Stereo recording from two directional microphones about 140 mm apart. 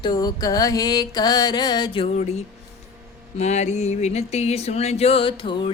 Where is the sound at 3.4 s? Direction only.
55° left (ahead or behind).